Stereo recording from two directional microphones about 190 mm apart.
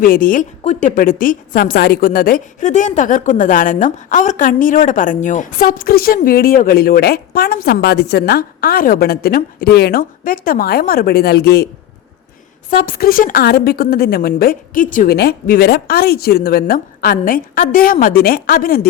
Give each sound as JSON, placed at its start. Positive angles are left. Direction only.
{"t": 0.0, "sound": "a woman's voice", "side_deg": 50}
{"t": 12.7, "sound": "a woman's voice", "side_deg": 45}